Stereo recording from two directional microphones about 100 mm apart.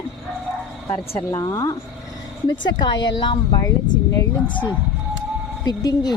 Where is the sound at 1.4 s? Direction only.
40° left (ahead or behind).